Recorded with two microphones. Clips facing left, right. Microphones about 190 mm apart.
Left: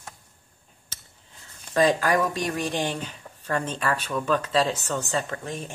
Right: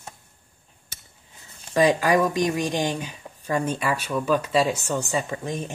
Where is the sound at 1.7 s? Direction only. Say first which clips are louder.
Right 2 dB; 15° right (ahead or behind).